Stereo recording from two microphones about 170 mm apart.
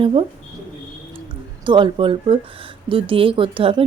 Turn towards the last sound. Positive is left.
turn(degrees=-30)  # may be behind; listen again after turning